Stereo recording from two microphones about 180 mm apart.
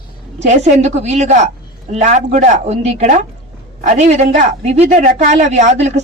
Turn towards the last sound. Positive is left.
turn(degrees=-40)  # may be behind; listen again after turning